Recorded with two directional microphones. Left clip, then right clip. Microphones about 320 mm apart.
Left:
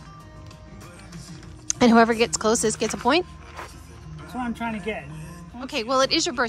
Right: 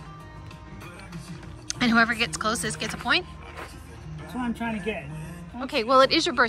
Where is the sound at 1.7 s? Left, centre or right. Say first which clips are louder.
Left 4 dB; left.